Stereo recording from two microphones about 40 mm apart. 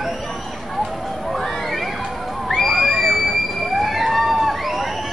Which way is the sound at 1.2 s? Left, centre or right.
Centre.